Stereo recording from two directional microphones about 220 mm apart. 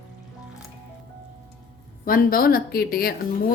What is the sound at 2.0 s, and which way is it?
A woman's voice, 40° left (ahead or behind).